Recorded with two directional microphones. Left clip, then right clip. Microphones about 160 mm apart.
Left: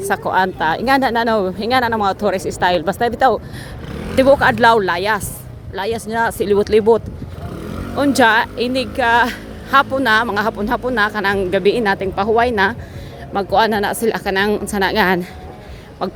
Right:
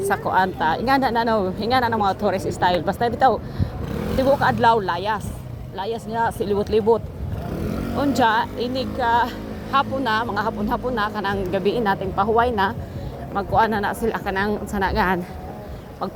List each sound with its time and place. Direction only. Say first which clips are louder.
0.0 s speech: left 3 dB; 65° left (ahead or behind); by 3.7 s 80° left
4.2 s speech: left 6 dB; 65° left (ahead or behind); by 12.7 s 50° left (ahead or behind)
13.3 s speech: left 4 dB; 80° left